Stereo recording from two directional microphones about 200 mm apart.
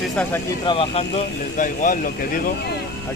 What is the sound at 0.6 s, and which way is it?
Speech, 25° left (ahead or behind).